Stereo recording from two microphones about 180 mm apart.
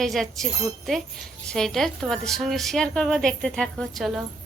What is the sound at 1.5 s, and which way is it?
A woman's voice, centre (ahead or behind).